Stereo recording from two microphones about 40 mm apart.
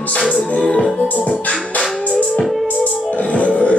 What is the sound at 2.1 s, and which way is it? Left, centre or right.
Music, left.